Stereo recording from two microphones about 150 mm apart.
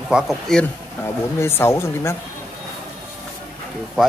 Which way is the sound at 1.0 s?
15° left (ahead or behind).